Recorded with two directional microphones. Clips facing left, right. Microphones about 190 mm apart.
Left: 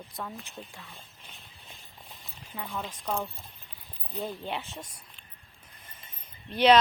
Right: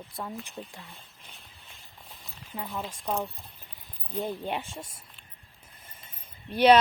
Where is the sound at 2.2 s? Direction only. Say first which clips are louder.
Right 2 dB; 5° right (ahead or behind).